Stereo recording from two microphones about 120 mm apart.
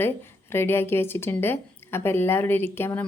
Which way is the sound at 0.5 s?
20° left (ahead or behind).